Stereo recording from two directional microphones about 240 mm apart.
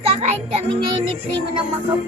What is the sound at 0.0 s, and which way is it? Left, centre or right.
Speech, right.